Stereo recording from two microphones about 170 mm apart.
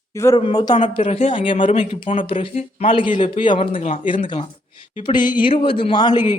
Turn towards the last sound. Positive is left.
turn(degrees=25)  # may be behind; listen again after turning